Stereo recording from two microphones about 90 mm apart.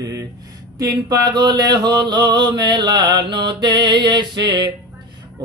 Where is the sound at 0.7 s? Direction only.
50° right (ahead or behind).